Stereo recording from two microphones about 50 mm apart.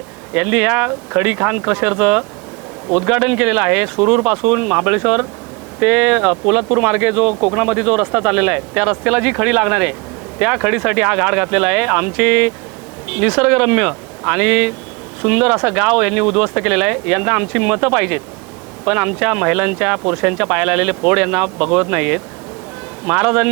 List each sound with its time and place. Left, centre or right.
0.3 s speech: centre